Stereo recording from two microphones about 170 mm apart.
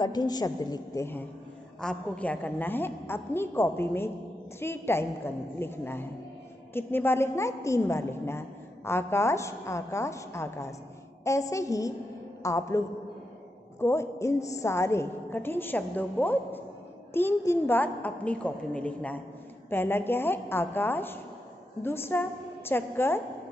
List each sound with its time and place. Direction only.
0.0 s a woman's voice: 25° left (ahead or behind)